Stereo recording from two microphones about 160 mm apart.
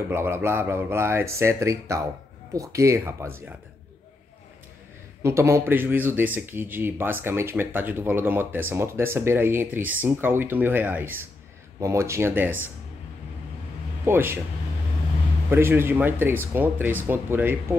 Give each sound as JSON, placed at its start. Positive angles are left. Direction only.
{"t": 0.1, "sound": "speech", "side_deg": -15}
{"t": 5.2, "sound": "speech", "side_deg": -15}
{"t": 14.0, "sound": "speech", "side_deg": -15}
{"t": 15.5, "sound": "speech", "side_deg": -15}